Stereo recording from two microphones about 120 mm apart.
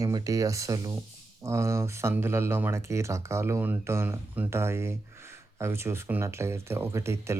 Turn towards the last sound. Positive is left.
turn(degrees=-25)  # may be behind; listen again after turning